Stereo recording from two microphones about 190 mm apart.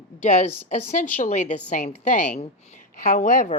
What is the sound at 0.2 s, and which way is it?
Speech, 40° left (ahead or behind).